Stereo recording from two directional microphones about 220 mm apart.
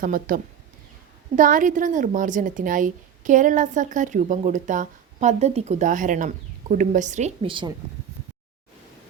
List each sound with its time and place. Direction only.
0.0 s a woman's voice: 40° right (ahead or behind); by 7.7 s 25° right (ahead or behind)